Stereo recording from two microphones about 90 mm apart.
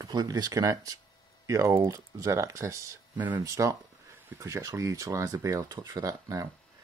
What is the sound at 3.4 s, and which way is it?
Speech, 35° right (ahead or behind).